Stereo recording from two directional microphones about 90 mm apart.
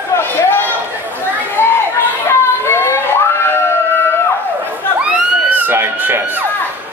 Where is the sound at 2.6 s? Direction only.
30° left (ahead or behind).